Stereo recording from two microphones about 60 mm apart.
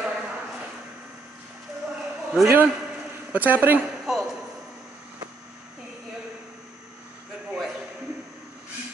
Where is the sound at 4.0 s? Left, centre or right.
Centre.